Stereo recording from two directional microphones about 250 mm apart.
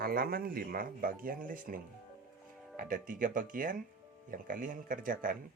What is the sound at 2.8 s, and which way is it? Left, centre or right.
Speech, right.